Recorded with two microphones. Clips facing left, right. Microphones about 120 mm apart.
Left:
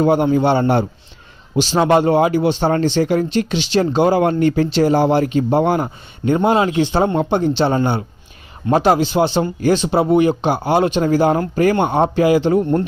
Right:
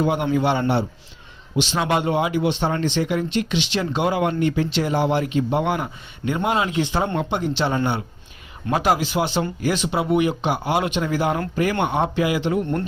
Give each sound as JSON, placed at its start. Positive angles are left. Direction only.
{"t": 0.0, "sound": "speech", "side_deg": 35}